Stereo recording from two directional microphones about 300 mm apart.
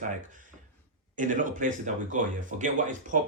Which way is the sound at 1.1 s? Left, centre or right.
Right.